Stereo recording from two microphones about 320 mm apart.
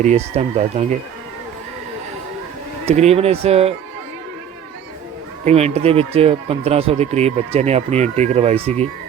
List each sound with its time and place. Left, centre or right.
0.0 s speech: right
2.8 s speech: centre
5.5 s speech: centre